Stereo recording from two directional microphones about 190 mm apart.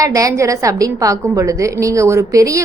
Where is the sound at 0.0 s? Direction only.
15° right (ahead or behind).